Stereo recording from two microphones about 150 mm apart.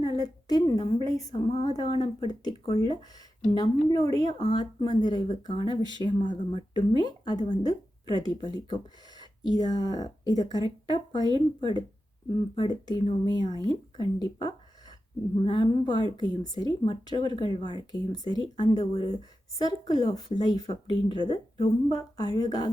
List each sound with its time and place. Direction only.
0.0 s a woman's voice: 25° left (ahead or behind)
11.2 s speech: 25° right (ahead or behind)
11.6 s speech: 30° left (ahead or behind)